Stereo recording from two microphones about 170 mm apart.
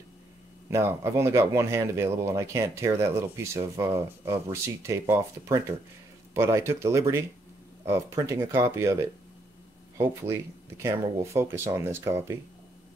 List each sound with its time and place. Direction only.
0.7 s speech: 15° right (ahead or behind)